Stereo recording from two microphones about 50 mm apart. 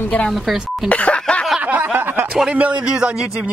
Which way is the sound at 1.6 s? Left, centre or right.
Right.